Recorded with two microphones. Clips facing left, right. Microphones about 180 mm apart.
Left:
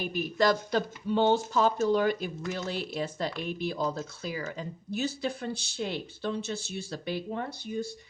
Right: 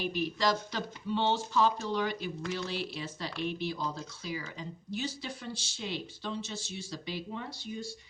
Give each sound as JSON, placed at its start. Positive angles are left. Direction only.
{"t": 0.0, "sound": "speech", "side_deg": 50}